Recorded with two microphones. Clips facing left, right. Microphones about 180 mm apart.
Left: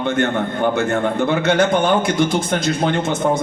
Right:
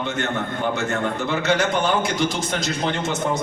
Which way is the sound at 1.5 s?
55° left (ahead or behind).